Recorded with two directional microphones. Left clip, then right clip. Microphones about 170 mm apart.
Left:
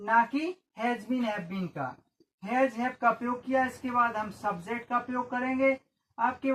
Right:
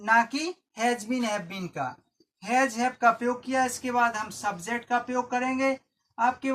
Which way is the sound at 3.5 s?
25° right (ahead or behind).